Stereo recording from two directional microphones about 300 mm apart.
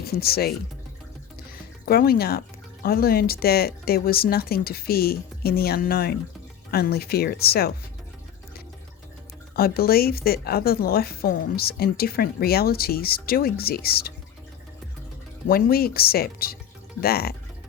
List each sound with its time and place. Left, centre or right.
0.0 s speech: left
1.9 s speech: left
9.6 s speech: left
15.4 s speech: left